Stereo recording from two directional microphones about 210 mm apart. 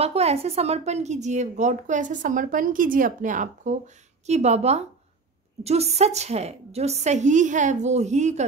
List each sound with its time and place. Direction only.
0.0 s a woman's voice: 30° right (ahead or behind)